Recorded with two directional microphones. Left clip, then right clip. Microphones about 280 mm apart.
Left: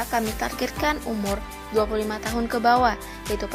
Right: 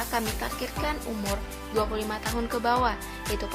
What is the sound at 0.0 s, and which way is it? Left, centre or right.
Speech, centre.